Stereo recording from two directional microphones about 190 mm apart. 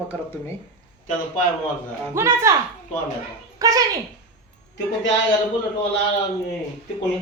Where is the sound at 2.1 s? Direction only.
15° right (ahead or behind).